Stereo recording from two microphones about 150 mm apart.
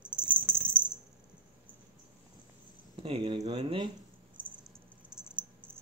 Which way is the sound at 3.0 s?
40° right (ahead or behind).